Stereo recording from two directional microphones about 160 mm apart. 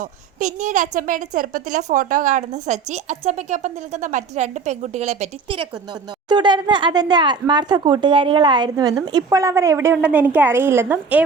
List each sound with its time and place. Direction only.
0.0 s a woman's voice: 50° right (ahead or behind)
5.9 s speech: 25° right (ahead or behind); by 11.2 s 10° right (ahead or behind)